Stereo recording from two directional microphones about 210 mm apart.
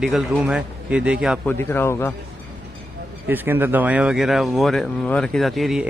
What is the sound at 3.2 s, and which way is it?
Speech, 10° right (ahead or behind).